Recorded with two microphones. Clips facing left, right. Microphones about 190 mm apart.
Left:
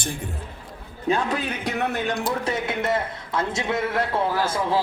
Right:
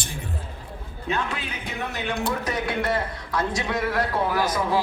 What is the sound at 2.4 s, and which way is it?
Speech, 25° left (ahead or behind).